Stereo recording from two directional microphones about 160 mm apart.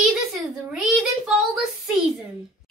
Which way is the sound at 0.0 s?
Centre (ahead or behind).